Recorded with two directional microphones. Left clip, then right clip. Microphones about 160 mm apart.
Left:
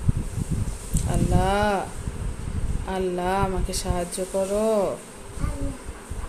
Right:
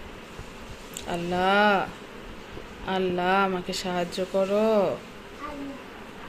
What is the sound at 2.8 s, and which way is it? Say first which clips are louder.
Speech: right 1 dB; 10° left (ahead or behind).